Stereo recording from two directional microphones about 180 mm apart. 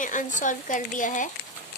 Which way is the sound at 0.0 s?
45° left (ahead or behind).